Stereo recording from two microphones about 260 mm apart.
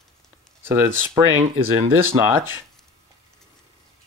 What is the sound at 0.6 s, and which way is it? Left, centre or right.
Speech, centre.